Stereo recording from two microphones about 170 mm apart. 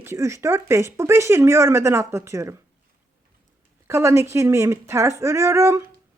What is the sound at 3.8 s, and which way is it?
A woman's voice, 15° right (ahead or behind).